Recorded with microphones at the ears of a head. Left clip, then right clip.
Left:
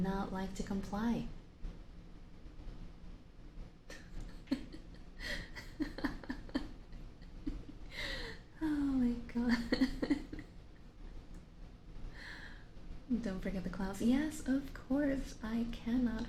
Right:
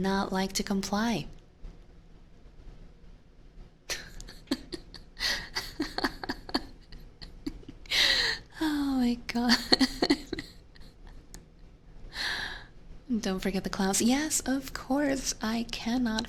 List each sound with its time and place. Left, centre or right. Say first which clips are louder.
0.0 s a woman's voice: right 10 dB; right
3.8 s beatboxing: right 16 dB; right
12.1 s gasp: right 18 dB; right
13.1 s a woman's voice: right 10 dB; right